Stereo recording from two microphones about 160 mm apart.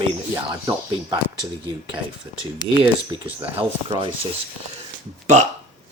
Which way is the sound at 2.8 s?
30° right (ahead or behind).